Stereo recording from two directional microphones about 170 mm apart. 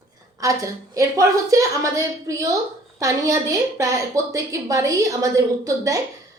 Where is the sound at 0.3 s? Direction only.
20° right (ahead or behind).